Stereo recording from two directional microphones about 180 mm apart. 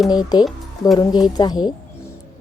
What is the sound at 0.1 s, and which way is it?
A woman's voice, 25° left (ahead or behind).